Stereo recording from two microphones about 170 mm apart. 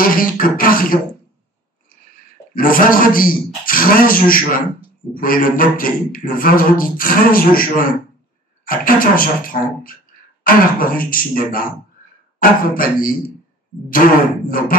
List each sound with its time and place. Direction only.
0.0 s a man's voice: 55° left (ahead or behind)
2.5 s a man's voice: 55° left (ahead or behind)
14.7 s a man's voice: 55° left (ahead or behind)